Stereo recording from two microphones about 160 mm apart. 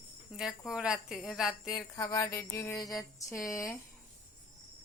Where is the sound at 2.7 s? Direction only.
Centre (ahead or behind).